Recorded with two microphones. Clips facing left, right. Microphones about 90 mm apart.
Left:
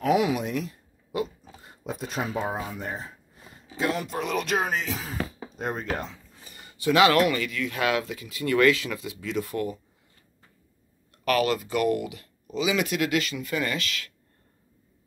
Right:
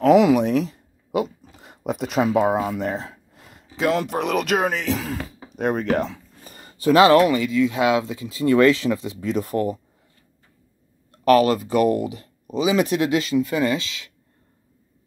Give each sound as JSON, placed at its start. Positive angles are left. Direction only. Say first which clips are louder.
{"t": 0.0, "sound": "speech", "louder": "right 9 dB", "side_deg": -75}
{"t": 1.6, "sound": "speech", "louder": "right 8 dB", "side_deg": -70}
{"t": 5.6, "sound": "speech", "louder": "right 9 dB", "side_deg": -65}
{"t": 6.4, "sound": "speech", "louder": "right 6 dB", "side_deg": -40}
{"t": 11.1, "sound": "speech", "louder": "right 8 dB", "side_deg": -35}